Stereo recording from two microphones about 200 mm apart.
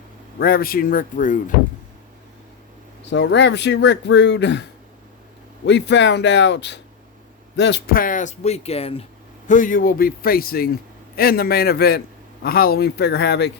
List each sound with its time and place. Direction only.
0.3 s a man's voice: 45° left (ahead or behind)
3.1 s speech: 65° left (ahead or behind)
5.6 s speech: 60° left (ahead or behind); by 9.0 s 30° left (ahead or behind)
9.5 s a man's voice: 40° left (ahead or behind)